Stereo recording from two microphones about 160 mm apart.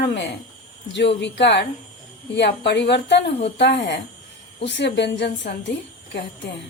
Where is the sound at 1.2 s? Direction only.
90° left.